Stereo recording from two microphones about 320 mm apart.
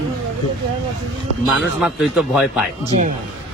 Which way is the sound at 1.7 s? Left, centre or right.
Centre.